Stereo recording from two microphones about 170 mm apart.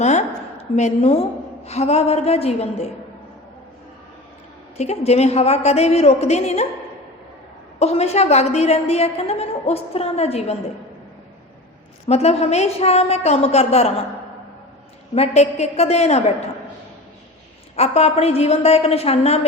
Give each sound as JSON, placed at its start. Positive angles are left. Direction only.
{"t": 0.0, "sound": "a woman's voice", "side_deg": 40}
{"t": 4.8, "sound": "a woman's voice", "side_deg": 40}
{"t": 7.8, "sound": "a woman's voice", "side_deg": 40}
{"t": 12.0, "sound": "a woman's voice", "side_deg": 40}
{"t": 15.1, "sound": "a woman's voice", "side_deg": 40}
{"t": 17.7, "sound": "a woman's voice", "side_deg": 40}